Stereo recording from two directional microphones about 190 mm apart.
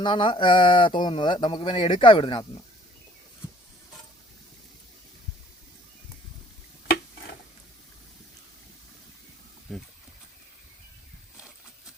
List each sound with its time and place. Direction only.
0.0 s speech: 25° left (ahead or behind)
9.7 s speech: centre (ahead or behind)